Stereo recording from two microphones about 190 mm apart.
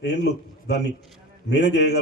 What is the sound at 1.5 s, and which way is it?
Speech, 65° left (ahead or behind).